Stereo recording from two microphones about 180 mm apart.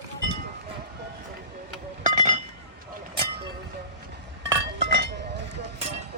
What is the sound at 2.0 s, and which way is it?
Chink, 45° right (ahead or behind).